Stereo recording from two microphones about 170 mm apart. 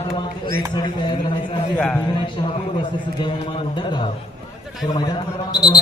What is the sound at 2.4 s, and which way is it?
A man's voice, 25° left (ahead or behind).